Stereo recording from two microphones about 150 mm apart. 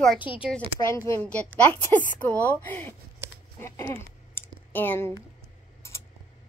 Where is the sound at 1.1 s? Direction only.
10° left (ahead or behind).